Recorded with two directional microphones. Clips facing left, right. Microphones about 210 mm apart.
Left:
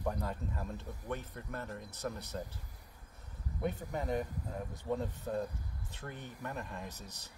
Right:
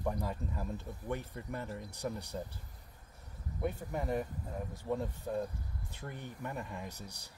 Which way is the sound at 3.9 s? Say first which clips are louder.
Even; 5° right (ahead or behind).